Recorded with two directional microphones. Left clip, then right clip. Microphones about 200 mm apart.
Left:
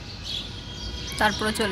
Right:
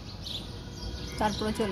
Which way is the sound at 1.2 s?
10° left (ahead or behind).